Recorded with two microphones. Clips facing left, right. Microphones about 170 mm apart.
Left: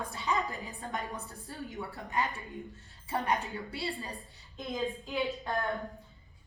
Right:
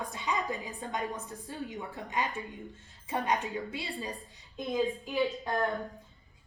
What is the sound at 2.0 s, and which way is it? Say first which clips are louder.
A woman's voice: even; 20° right (ahead or behind).